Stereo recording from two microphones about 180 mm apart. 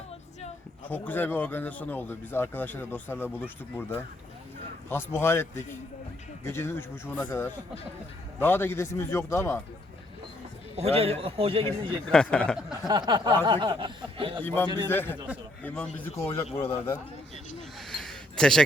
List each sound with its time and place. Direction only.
0.9 s speech: 10° left (ahead or behind)
10.8 s a man's voice: 35° right (ahead or behind)
12.0 s speech: 5° left (ahead or behind)
12.9 s speech: 25° right (ahead or behind)
14.4 s speech: 10° left (ahead or behind)
16.6 s a man's voice: 35° left (ahead or behind)
17.7 s a sound: centre (ahead or behind)